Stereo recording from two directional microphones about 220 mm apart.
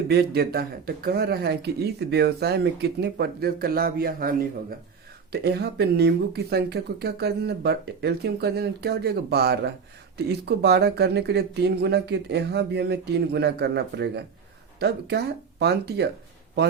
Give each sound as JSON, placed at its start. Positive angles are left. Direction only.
{"t": 0.1, "sound": "speech", "side_deg": -45}